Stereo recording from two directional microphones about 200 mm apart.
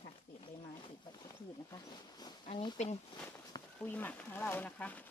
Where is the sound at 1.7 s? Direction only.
20° left (ahead or behind).